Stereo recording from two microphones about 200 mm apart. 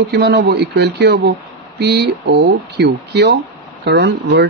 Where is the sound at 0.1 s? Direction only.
55° right (ahead or behind).